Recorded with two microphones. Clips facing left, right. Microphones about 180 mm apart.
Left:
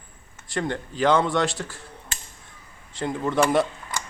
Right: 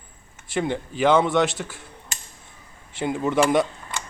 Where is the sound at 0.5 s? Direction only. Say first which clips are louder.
Right 2 dB; 5° right (ahead or behind).